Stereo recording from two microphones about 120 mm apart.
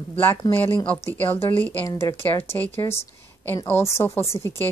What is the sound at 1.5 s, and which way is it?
Speech, 15° left (ahead or behind).